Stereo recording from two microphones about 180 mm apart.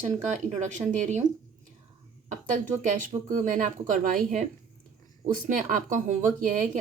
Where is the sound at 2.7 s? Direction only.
45° right (ahead or behind).